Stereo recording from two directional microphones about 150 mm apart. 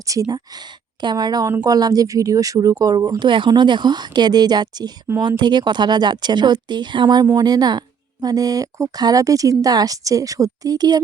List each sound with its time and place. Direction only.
0.1 s speech: 25° right (ahead or behind)
5.0 s speech: 15° right (ahead or behind)